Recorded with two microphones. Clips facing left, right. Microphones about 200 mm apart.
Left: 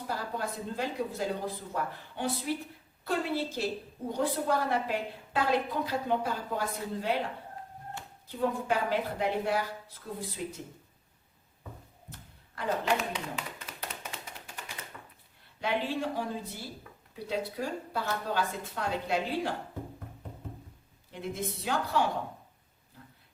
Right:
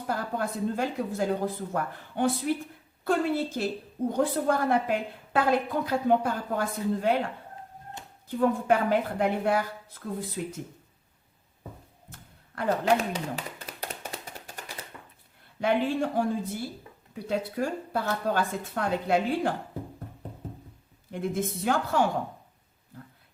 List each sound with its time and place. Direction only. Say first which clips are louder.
0.1 s a woman's voice: right 5 dB; 50° right (ahead or behind)
8.4 s a woman's voice: right 6 dB; 50° right (ahead or behind)
12.5 s a woman's voice: right 5 dB; 45° right (ahead or behind)
13.8 s tap: right 4 dB; 40° right (ahead or behind)
15.6 s a woman's voice: right 6 dB; 50° right (ahead or behind)
21.1 s a woman's voice: right 6 dB; 50° right (ahead or behind)